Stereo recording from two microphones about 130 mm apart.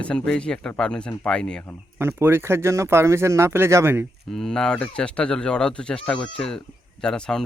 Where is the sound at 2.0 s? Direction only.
20° right (ahead or behind).